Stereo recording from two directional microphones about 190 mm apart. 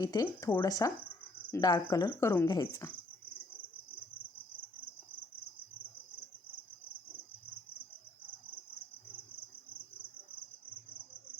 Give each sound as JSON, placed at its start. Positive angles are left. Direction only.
{"t": 0.0, "sound": "speech", "side_deg": 20}